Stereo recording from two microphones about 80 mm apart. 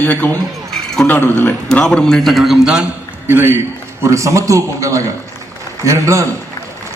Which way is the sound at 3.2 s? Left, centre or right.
Right.